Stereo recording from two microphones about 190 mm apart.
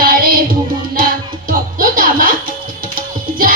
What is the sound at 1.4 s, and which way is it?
Music, 50° right (ahead or behind).